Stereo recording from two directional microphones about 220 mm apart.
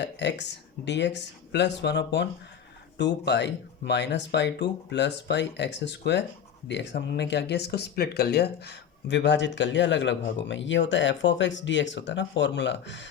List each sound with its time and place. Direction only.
0.0 s speech: 50° left (ahead or behind)